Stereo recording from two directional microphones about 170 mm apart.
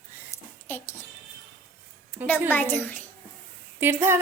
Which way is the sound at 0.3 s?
15° left (ahead or behind).